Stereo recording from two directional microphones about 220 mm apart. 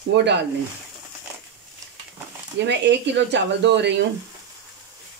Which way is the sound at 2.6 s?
50° right (ahead or behind).